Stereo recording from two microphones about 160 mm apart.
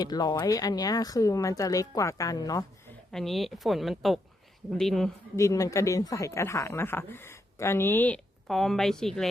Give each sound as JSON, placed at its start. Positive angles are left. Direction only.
{"t": 0.0, "sound": "speech", "side_deg": 25}
{"t": 3.1, "sound": "speech", "side_deg": 0}
{"t": 5.4, "sound": "speech", "side_deg": 20}